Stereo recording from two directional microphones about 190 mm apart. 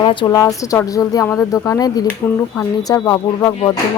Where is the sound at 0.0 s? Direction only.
25° left (ahead or behind).